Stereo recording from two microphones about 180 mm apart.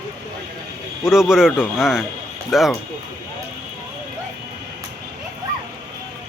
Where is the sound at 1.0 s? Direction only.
Centre (ahead or behind).